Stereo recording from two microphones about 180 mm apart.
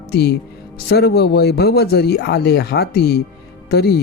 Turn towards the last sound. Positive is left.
turn(degrees=60)  # may be behind; listen again after turning